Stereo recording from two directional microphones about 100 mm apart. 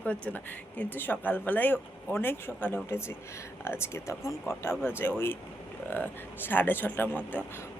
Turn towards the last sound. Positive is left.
turn(degrees=20)  # may be behind; listen again after turning